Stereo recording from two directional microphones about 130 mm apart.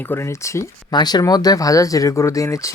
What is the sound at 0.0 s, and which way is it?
Speech, 20° left (ahead or behind).